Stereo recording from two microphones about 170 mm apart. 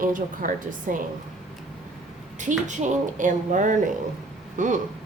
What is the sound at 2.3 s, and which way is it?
A woman's voice, 45° right (ahead or behind).